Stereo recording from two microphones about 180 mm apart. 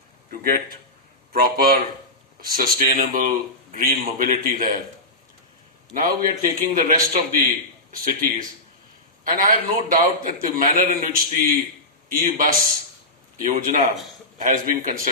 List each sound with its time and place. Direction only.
0.3 s a man's voice: 55° right (ahead or behind)
5.9 s a man's voice: 50° right (ahead or behind)